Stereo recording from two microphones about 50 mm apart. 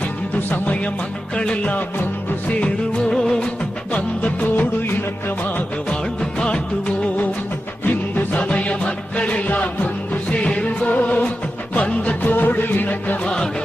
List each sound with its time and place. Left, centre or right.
1.4 s music: left
3.9 s music: left
7.9 s music: left
12.3 s music: left
13.2 s music: centre